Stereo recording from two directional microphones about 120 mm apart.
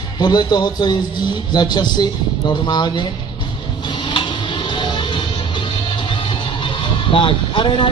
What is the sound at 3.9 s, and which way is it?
Music, 40° left (ahead or behind).